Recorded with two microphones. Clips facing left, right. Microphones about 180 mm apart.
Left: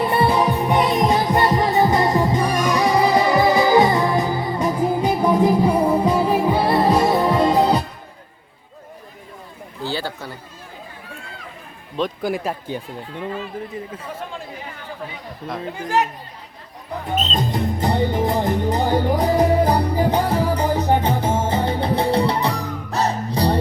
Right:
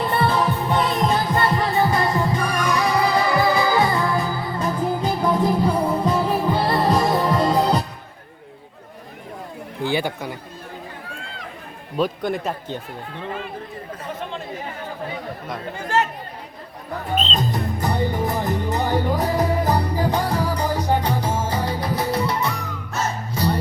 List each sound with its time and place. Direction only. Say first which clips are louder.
0.0 s music: left 3 dB; 15° left (ahead or behind)
9.8 s chatter: right 3 dB; 15° right (ahead or behind)
11.9 s a man's voice: even; centre (ahead or behind)
17.5 s music: left 3 dB; 20° left (ahead or behind)